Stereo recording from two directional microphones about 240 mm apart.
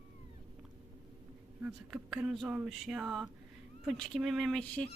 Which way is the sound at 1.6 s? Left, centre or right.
Centre.